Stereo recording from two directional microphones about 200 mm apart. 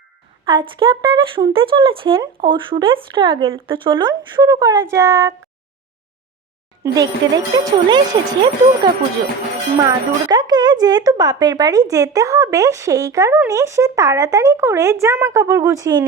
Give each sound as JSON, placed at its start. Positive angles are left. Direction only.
{"t": 0.4, "sound": "speech", "side_deg": -25}
{"t": 6.8, "sound": "speech", "side_deg": -20}